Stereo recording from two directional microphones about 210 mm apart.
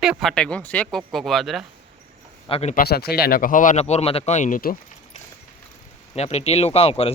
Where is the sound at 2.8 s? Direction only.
50° left (ahead or behind).